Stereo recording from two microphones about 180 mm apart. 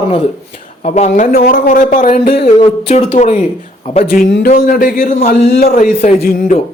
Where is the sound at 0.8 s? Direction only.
40° left (ahead or behind).